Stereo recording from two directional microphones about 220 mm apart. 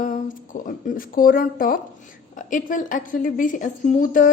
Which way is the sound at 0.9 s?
40° left (ahead or behind).